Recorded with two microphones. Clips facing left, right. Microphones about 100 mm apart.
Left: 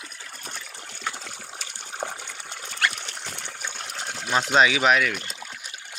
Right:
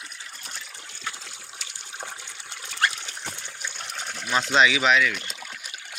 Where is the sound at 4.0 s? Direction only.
30° left (ahead or behind).